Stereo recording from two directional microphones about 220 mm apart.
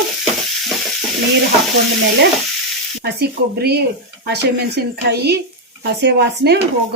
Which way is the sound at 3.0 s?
45° right (ahead or behind).